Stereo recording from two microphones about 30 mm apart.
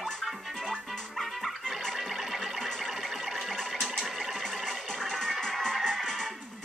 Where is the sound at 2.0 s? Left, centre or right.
Centre.